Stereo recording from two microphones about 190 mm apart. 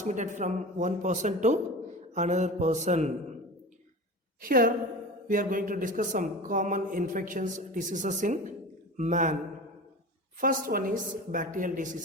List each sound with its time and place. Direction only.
0.0 s speech: 40° right (ahead or behind)
4.4 s a woman's voice: 45° right (ahead or behind)
10.4 s speech: 50° right (ahead or behind)